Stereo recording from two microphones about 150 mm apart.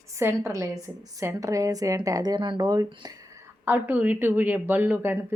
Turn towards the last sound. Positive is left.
turn(degrees=-15)  # may be behind; listen again after turning